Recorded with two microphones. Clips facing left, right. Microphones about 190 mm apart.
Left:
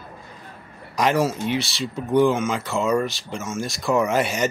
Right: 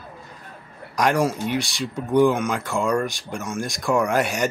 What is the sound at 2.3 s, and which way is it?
Speech, centre (ahead or behind).